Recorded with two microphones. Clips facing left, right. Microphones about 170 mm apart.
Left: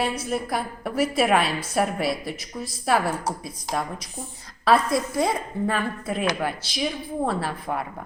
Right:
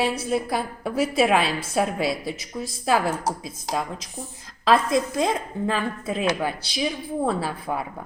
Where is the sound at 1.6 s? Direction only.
25° right (ahead or behind).